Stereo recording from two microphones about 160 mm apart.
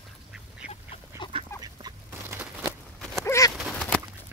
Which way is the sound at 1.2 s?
30° left (ahead or behind).